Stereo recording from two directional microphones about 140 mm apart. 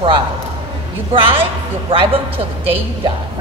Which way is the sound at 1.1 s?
40° right (ahead or behind).